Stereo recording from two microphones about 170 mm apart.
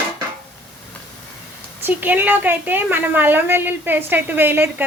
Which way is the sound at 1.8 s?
10° right (ahead or behind).